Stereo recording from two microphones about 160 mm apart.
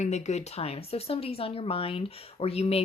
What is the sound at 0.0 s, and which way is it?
A woman's voice, 45° left (ahead or behind).